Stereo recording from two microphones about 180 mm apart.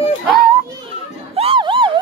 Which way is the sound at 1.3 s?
30° right (ahead or behind).